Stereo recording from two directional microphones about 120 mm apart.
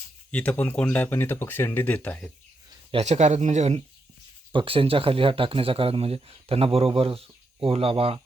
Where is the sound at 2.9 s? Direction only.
65° right (ahead or behind).